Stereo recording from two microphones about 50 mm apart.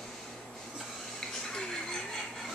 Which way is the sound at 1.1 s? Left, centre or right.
Centre.